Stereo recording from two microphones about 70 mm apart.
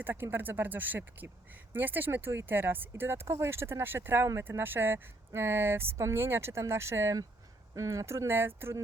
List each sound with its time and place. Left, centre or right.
0.0 s speech: right